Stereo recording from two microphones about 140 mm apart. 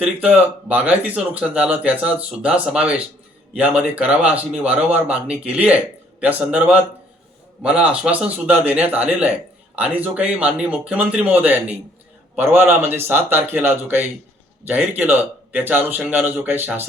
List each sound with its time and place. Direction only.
0.0 s speech: 10° right (ahead or behind)